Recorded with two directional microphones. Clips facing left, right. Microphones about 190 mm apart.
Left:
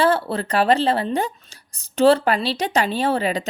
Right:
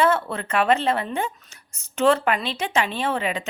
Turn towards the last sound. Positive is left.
turn(degrees=40)  # may be behind; listen again after turning